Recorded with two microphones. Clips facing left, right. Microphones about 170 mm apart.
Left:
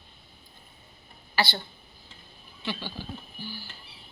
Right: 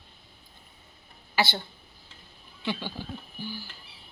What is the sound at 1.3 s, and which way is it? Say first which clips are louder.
Speech: right 1 dB; 20° right (ahead or behind).